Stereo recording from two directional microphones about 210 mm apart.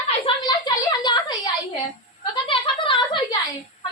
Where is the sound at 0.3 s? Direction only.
20° left (ahead or behind).